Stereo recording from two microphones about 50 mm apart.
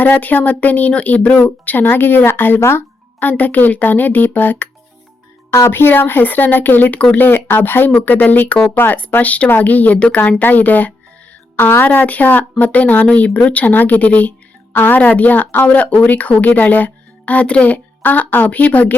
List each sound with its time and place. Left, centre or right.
0.0 s a woman's voice: left
2.6 s speech: left
3.2 s a woman's voice: left
5.5 s speech: left
5.7 s a woman's voice: left
8.0 s a woman's voice: left
8.7 s speech: left
9.0 s a woman's voice: left
11.5 s speech: left
11.9 s a woman's voice: left
18.0 s a woman's voice: left